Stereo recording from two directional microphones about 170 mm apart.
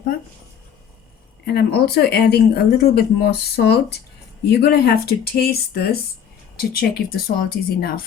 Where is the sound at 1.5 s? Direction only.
70° left (ahead or behind).